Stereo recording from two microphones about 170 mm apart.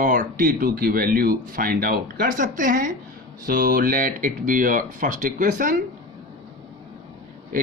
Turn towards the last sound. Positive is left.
turn(degrees=-55)  # may be behind; listen again after turning